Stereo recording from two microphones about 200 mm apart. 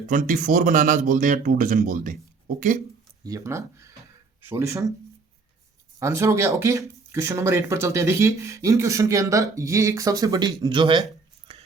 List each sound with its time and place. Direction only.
0.1 s speech: 40° right (ahead or behind)
3.2 s speech: 15° right (ahead or behind)
6.0 s speech: 15° right (ahead or behind)
11.5 s whispering: 30° right (ahead or behind)